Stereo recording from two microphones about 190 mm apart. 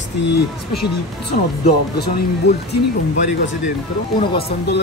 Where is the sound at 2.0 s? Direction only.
60° left (ahead or behind).